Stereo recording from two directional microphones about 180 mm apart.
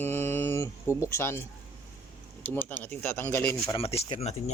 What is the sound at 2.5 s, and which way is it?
Speech, 10° left (ahead or behind).